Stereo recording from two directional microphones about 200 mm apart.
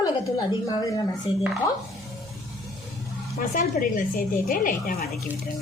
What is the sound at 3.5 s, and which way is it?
Speech, 45° left (ahead or behind).